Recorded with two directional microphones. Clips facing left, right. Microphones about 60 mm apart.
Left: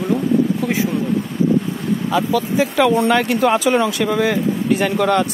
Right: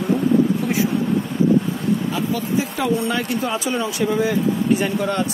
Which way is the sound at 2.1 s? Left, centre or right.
Left.